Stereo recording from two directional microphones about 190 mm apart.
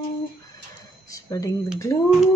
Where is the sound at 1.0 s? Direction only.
20° left (ahead or behind).